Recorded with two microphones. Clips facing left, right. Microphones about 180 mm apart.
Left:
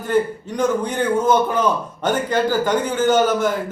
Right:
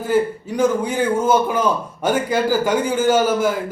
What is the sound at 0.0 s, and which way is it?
A man's voice, 10° right (ahead or behind).